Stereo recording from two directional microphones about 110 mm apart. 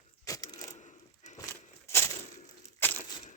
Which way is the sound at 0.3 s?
30° left (ahead or behind).